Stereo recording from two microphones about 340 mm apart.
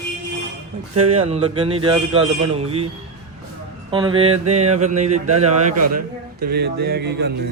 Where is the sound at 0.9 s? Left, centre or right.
Centre.